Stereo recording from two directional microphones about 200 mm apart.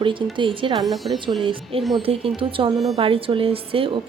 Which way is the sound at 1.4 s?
25° right (ahead or behind).